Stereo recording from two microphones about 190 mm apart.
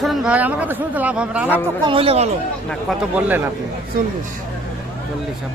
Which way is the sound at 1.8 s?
30° right (ahead or behind).